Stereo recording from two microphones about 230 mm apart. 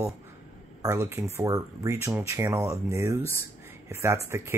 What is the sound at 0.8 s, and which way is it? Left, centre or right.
Speech, centre.